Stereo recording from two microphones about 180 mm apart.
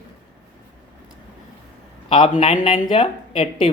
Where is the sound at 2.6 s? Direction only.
30° left (ahead or behind).